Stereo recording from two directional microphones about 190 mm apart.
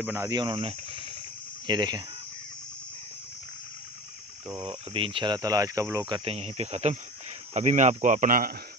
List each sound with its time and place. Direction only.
0.0 s speech: 15° right (ahead or behind)
4.6 s speech: 30° right (ahead or behind); by 8.5 s 50° right (ahead or behind)